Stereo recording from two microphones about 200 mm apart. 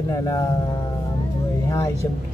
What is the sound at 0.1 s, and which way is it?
Speech, 15° left (ahead or behind).